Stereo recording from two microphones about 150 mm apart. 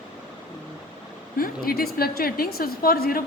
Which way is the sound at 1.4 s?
80° left.